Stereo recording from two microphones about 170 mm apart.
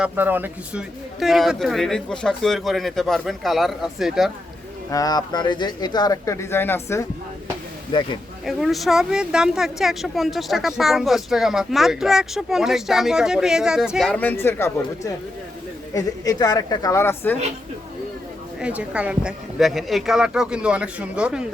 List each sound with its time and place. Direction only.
0.0 s speech: 10° right (ahead or behind)
4.9 s speech: 20° left (ahead or behind)
7.9 s speech: 25° left (ahead or behind)
8.4 s speech: centre (ahead or behind)
14.2 s speech: 10° left (ahead or behind)
18.6 s speech: 5° right (ahead or behind)